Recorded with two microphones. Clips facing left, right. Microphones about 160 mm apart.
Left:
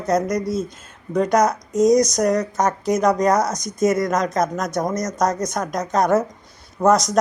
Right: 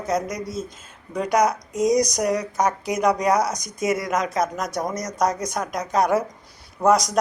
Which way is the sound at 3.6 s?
45° left (ahead or behind).